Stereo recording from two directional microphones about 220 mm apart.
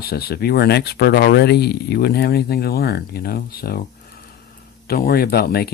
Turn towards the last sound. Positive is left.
turn(degrees=45)  # may be behind; listen again after turning